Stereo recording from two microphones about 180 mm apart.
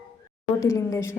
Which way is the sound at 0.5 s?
20° left (ahead or behind).